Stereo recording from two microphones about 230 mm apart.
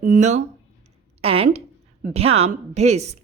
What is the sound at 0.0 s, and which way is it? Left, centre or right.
A woman's voice, right.